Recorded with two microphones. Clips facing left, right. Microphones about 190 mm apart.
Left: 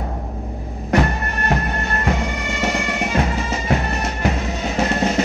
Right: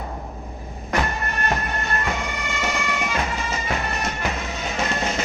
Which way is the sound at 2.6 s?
35° left (ahead or behind).